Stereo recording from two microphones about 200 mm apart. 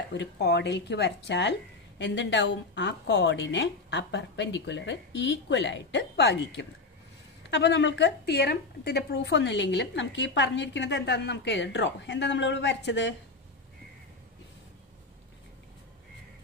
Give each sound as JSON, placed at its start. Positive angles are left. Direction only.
{"t": 0.1, "sound": "speech", "side_deg": 60}